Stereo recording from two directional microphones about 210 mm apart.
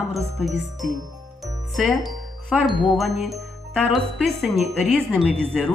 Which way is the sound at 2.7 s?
20° left (ahead or behind).